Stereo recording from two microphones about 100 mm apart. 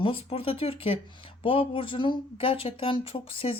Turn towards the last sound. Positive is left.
turn(degrees=70)  # may be behind; listen again after turning